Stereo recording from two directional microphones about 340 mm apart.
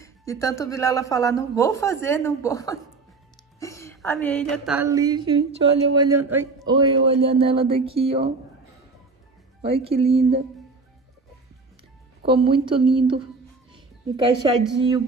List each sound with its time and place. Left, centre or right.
0.0 s speech: centre
3.5 s a sound: centre
5.9 s a man's voice: centre
9.6 s a man's voice: centre
12.3 s a man's voice: centre